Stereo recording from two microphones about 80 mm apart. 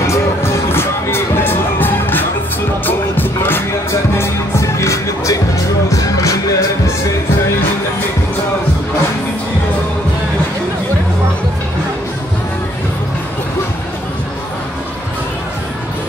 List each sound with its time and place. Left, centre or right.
0.0 s music: left
4.2 s music: left